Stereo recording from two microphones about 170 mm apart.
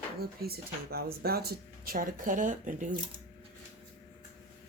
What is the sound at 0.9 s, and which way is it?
Speech, 65° right (ahead or behind).